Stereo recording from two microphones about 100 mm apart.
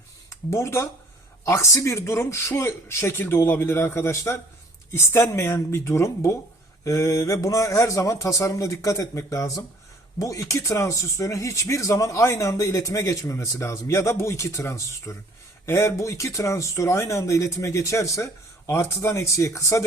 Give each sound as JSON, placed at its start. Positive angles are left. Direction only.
{"t": 0.3, "sound": "speech", "side_deg": 30}